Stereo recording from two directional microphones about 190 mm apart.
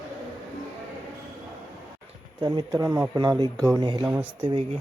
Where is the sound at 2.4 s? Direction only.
25° right (ahead or behind).